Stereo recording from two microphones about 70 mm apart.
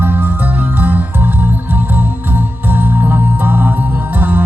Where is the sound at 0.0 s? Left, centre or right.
Right.